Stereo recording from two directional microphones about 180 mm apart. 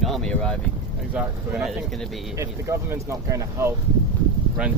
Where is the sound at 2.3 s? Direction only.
15° right (ahead or behind).